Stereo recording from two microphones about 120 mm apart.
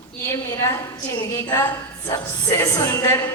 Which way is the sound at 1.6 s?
20° left (ahead or behind).